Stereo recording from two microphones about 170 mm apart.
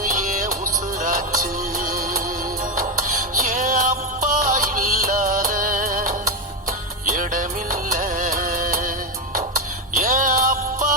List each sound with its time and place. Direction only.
0.0 s music: 50° right (ahead or behind)